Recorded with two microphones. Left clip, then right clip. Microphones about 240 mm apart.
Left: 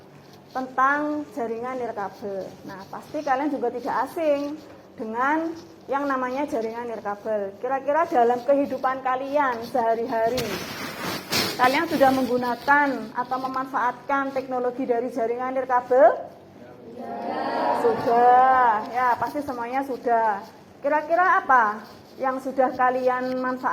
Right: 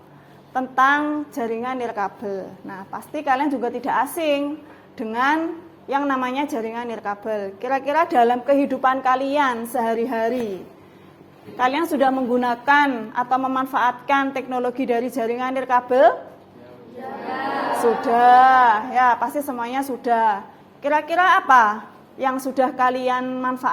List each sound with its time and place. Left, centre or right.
0.5 s a woman's voice: right
6.5 s a woman's voice: right
11.5 s a woman's voice: right
15.2 s a woman's voice: right
18.1 s a woman's voice: right